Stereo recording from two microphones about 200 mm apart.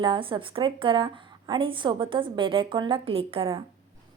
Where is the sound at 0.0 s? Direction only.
25° right (ahead or behind).